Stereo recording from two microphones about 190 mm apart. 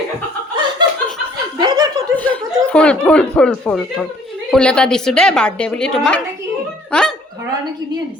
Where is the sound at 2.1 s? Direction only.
5° left (ahead or behind).